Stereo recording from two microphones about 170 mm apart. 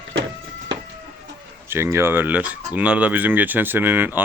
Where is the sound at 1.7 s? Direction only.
15° right (ahead or behind).